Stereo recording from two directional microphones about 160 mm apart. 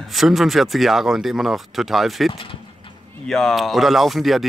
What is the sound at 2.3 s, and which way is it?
Speech, 35° left (ahead or behind).